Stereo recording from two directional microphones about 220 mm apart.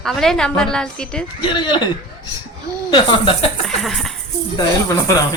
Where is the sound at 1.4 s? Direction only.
20° left (ahead or behind).